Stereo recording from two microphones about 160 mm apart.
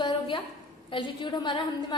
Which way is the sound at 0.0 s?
30° left (ahead or behind).